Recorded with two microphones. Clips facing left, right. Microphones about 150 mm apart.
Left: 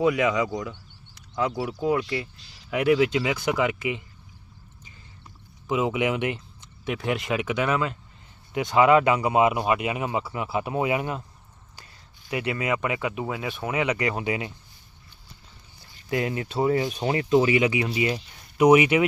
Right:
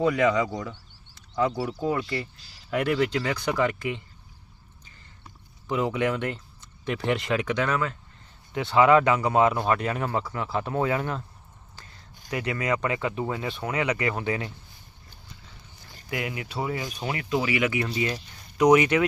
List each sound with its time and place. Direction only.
0.0 s speech: 5° left (ahead or behind)
5.6 s speech: 10° left (ahead or behind)
6.8 s speech: centre (ahead or behind)
12.5 s speech: 20° left (ahead or behind)
16.0 s speech: 30° left (ahead or behind); by 19.0 s 10° left (ahead or behind)